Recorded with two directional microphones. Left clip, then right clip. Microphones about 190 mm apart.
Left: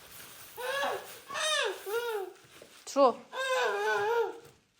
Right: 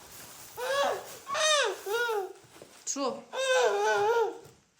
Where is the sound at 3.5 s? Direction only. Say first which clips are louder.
Right 4 dB; 15° right (ahead or behind).